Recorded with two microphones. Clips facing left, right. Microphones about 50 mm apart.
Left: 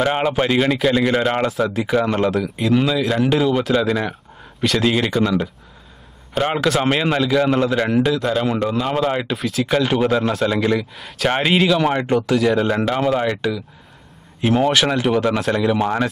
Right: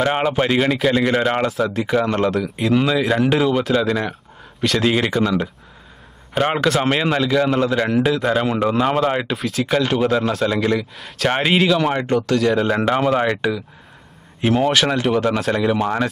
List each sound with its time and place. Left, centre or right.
0.0 s a man's voice: centre
8.6 s speech: centre
9.0 s speech: centre
14.4 s speech: centre